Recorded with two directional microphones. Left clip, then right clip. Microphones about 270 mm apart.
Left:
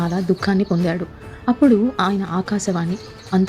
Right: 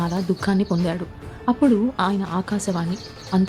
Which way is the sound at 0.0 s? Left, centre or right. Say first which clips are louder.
Left 3 dB; centre.